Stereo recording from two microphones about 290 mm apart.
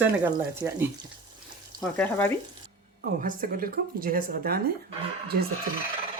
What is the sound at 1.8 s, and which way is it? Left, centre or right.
Speech, centre.